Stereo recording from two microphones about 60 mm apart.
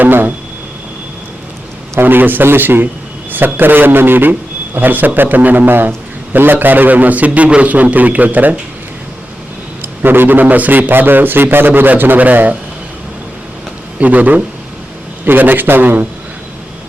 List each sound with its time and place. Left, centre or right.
0.0 s a man's voice: right
2.0 s a man's voice: right
9.8 s a man's voice: right
14.0 s a man's voice: right